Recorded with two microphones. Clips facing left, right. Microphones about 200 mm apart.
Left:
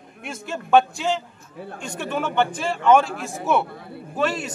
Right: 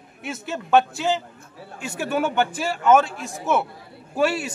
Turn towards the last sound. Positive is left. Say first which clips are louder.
# right 2 dB
turn(degrees=-10)  # may be behind; listen again after turning